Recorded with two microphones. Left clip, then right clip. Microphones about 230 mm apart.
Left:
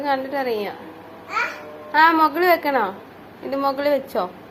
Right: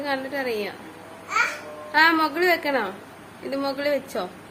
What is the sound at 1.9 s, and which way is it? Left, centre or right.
A woman's voice, centre.